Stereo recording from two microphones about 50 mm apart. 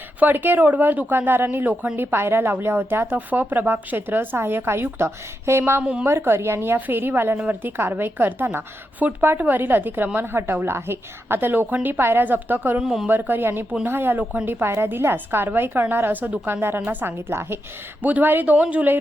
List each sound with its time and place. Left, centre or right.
0.2 s a woman's voice: right
3.2 s a woman's voice: right
5.8 s speech: right
6.1 s a woman's voice: right
6.7 s a woman's voice: right
7.3 s speech: right
7.8 s a woman's voice: right
12.8 s speech: centre
13.1 s a woman's voice: right
17.2 s a woman's voice: right
18.0 s speech: right
18.5 s speech: right